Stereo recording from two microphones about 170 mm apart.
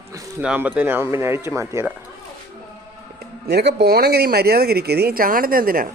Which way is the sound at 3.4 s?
75° right (ahead or behind).